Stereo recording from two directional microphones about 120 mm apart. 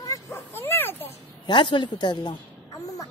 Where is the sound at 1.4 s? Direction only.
40° left (ahead or behind).